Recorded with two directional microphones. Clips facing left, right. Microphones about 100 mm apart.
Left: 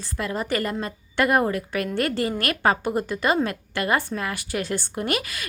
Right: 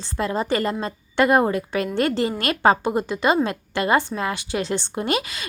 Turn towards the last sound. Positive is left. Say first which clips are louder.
# right 2 dB
turn(degrees=-25)  # may be behind; listen again after turning